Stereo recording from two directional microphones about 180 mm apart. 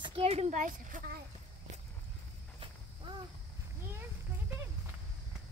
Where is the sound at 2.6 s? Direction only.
25° right (ahead or behind).